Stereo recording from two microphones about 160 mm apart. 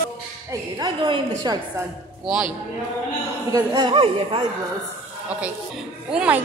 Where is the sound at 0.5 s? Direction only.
25° right (ahead or behind).